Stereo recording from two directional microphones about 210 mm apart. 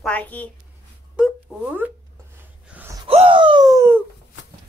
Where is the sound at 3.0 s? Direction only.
25° right (ahead or behind).